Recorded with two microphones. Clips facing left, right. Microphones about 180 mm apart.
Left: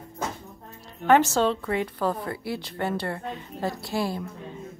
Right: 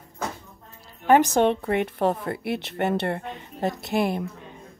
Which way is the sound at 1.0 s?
15° right (ahead or behind).